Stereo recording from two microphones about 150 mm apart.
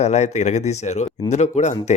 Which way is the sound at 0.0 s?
50° left (ahead or behind).